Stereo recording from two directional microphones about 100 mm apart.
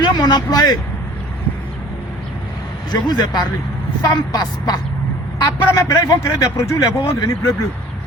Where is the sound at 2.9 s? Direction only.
45° left (ahead or behind).